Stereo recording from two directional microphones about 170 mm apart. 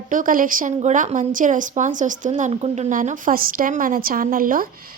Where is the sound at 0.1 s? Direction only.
55° right (ahead or behind).